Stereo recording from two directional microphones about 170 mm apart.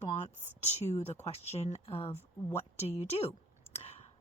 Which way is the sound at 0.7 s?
40° left (ahead or behind).